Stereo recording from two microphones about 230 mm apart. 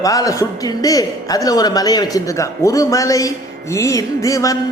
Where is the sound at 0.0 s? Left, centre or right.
Centre.